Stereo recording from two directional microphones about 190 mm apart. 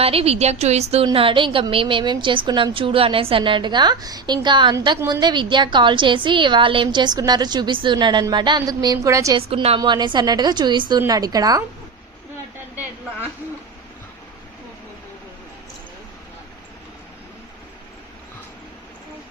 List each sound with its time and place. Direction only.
0.0 s a woman's voice: 30° right (ahead or behind); by 9.4 s 15° right (ahead or behind)
9.5 s a woman's voice: 25° right (ahead or behind)